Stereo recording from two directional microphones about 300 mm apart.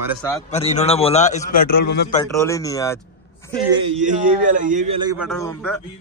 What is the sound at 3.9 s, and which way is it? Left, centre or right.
A man's voice, right.